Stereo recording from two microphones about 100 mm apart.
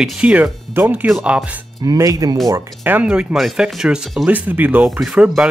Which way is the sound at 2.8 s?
15° right (ahead or behind).